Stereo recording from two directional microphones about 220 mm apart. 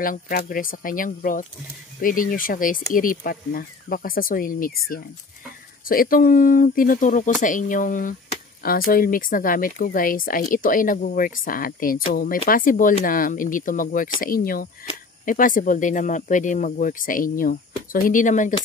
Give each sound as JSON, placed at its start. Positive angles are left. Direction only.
{"t": 0.0, "sound": "speech", "side_deg": 40}
{"t": 5.9, "sound": "speech", "side_deg": 40}